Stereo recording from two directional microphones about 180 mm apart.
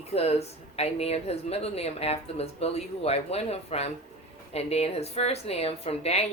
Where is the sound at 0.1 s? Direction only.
35° left (ahead or behind).